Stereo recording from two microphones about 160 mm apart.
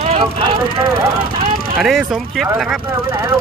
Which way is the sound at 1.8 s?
Centre (ahead or behind).